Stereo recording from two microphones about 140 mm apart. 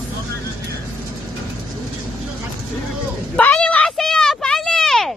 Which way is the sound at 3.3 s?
10° left (ahead or behind).